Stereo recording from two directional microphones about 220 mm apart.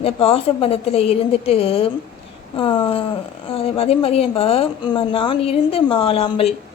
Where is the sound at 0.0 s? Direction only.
25° left (ahead or behind).